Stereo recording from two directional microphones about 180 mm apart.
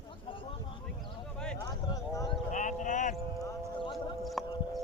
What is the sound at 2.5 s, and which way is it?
Clip-clop, 45° left (ahead or behind).